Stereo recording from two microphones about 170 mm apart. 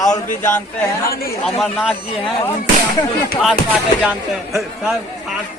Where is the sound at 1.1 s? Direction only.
60° left (ahead or behind).